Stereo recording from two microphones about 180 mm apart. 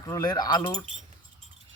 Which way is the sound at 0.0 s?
20° left (ahead or behind).